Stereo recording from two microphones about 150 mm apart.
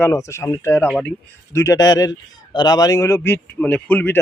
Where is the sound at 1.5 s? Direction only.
20° left (ahead or behind).